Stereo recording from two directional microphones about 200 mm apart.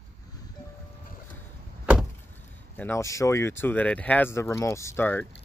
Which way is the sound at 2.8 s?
15° left (ahead or behind).